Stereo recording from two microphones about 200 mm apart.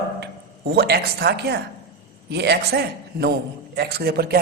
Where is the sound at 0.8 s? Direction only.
55° right (ahead or behind).